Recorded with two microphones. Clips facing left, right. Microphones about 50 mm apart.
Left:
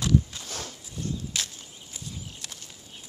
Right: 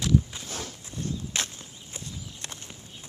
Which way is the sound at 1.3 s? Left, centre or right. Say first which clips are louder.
Right 2 dB; right.